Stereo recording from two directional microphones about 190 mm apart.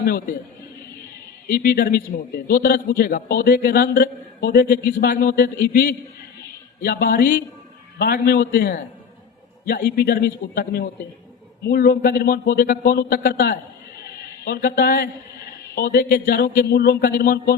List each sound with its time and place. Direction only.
0.0 s a man's voice: 55° left (ahead or behind)
1.5 s a man's voice: 55° left (ahead or behind)
14.0 s a sound: 55° left (ahead or behind)
15.7 s a man's voice: 55° left (ahead or behind)